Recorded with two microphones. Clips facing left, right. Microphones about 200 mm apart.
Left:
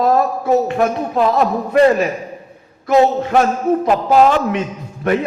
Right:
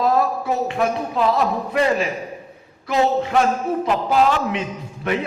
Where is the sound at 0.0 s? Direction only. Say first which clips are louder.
Left 4 dB; 45° left (ahead or behind).